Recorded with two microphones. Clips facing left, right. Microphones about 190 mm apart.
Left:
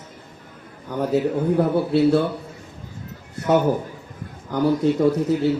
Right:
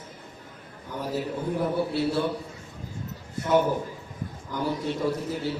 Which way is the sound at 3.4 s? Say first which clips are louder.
Left 4 dB; 65° left (ahead or behind).